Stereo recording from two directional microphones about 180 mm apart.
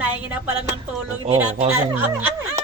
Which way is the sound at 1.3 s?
35° right (ahead or behind).